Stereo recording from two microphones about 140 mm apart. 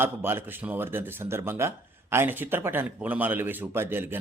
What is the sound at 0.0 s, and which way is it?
Speech, 15° right (ahead or behind).